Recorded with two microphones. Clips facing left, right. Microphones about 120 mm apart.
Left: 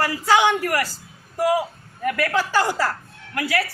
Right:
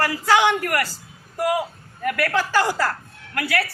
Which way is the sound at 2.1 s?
10° left (ahead or behind).